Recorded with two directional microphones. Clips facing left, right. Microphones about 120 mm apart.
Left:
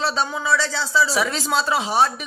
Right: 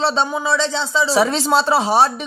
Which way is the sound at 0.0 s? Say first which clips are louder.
Right 4 dB; 25° right (ahead or behind).